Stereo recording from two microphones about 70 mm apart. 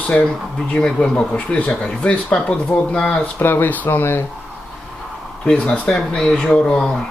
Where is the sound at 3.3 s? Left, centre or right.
Left.